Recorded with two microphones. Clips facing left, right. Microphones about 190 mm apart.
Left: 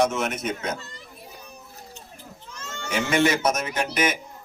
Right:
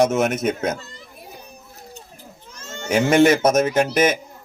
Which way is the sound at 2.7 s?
45° right (ahead or behind).